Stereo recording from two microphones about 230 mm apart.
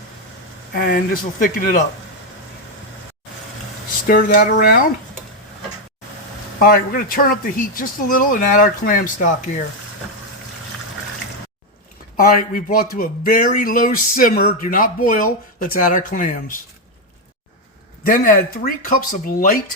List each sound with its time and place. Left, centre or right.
0.7 s speech: left
4.0 s speech: left
6.6 s speech: left
12.2 s speech: left
18.0 s speech: left